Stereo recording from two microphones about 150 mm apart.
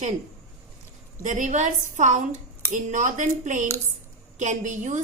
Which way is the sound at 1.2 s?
55° right (ahead or behind).